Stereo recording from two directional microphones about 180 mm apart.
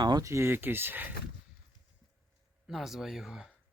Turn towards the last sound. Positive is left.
turn(degrees=-5)  # may be behind; listen again after turning